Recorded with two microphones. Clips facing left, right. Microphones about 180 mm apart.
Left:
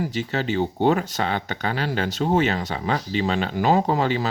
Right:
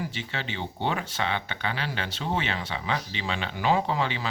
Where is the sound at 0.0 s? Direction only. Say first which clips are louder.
Left 9 dB; 40° left (ahead or behind).